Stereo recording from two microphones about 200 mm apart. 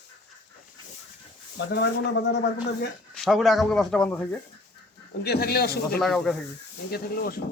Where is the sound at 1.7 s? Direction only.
60° left (ahead or behind).